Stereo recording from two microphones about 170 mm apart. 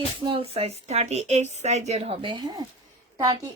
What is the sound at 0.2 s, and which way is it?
A woman's voice, 30° right (ahead or behind).